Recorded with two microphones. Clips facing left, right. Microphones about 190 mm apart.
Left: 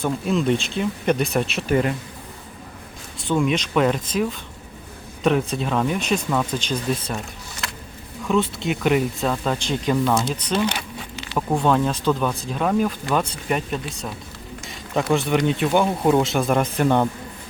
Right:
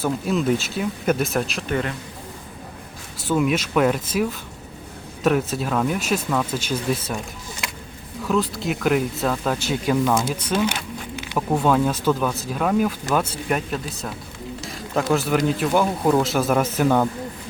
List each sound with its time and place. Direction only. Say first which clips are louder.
0.0 s speech: even; 5° right (ahead or behind)
3.2 s speech: even; 5° right (ahead or behind)
8.2 s speech: left 1 dB; centre (ahead or behind)